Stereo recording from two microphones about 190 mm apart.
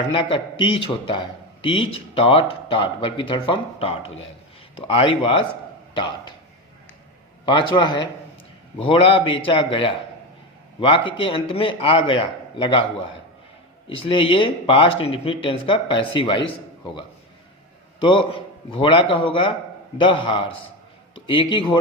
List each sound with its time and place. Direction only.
0.1 s speech: 25° left (ahead or behind)
7.4 s speech: 25° left (ahead or behind)
13.8 s speech: 30° left (ahead or behind)
18.7 s speech: 25° left (ahead or behind)